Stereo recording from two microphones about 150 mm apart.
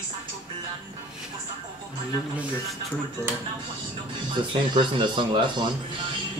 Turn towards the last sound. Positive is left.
turn(degrees=-30)  # may be behind; listen again after turning